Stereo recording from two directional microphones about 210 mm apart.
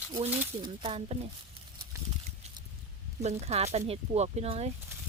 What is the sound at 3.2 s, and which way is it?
Speech, 30° right (ahead or behind).